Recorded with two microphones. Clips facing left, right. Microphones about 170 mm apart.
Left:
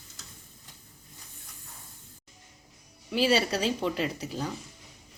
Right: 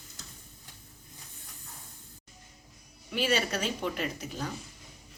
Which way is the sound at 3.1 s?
30° left (ahead or behind).